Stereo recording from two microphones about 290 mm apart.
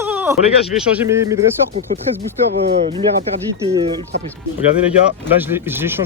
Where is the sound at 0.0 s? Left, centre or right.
Centre.